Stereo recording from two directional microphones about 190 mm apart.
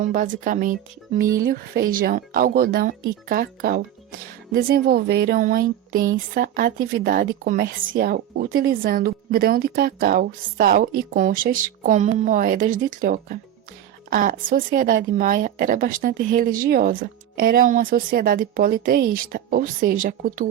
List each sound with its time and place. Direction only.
0.0 s speech: 45° right (ahead or behind)